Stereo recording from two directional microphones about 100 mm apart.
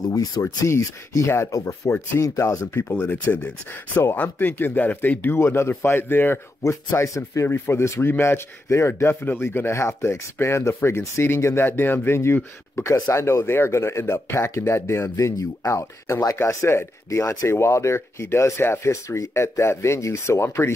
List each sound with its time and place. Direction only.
0.1 s speech: 40° left (ahead or behind)